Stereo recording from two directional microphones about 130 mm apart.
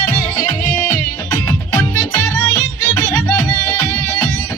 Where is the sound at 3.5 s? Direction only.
30° left (ahead or behind).